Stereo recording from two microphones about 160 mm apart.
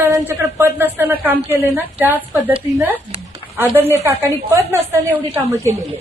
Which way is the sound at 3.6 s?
15° right (ahead or behind).